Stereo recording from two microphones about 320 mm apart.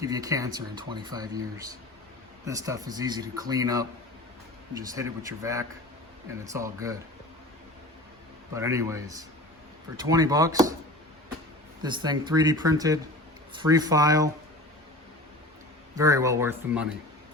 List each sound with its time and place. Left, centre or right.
0.0 s speech: centre
8.5 s speech: centre
11.8 s speech: centre
16.0 s speech: centre